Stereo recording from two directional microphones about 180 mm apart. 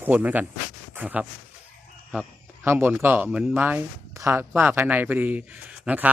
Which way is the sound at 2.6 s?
10° right (ahead or behind).